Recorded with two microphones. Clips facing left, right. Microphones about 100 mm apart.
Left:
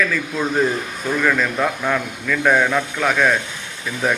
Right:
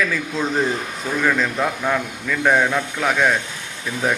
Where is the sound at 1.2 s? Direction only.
15° right (ahead or behind).